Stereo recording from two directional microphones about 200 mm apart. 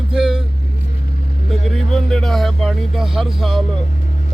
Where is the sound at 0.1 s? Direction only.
5° right (ahead or behind).